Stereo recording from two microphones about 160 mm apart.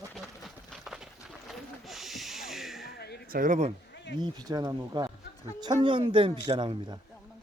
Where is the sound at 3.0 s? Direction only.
90° left.